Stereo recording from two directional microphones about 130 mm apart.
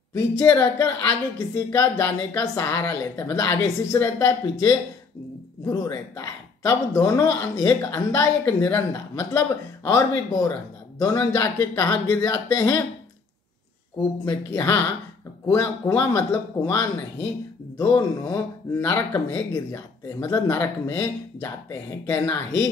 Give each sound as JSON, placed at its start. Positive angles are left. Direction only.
{"t": 0.1, "sound": "a woman's voice", "side_deg": 25}
{"t": 13.9, "sound": "a woman's voice", "side_deg": 25}